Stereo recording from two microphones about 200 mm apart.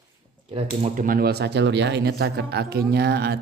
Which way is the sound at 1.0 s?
50° right (ahead or behind).